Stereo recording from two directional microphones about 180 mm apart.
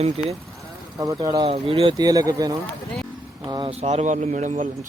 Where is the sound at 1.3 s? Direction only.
30° right (ahead or behind).